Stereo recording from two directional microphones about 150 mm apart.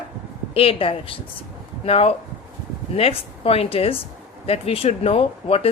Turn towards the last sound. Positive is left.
turn(degrees=40)  # may be behind; listen again after turning